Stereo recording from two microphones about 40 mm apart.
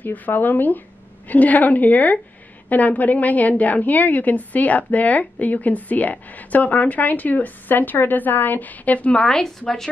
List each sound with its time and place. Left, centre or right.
0.0 s a woman's voice: left
1.3 s a woman's voice: left
9.1 s a woman's voice: centre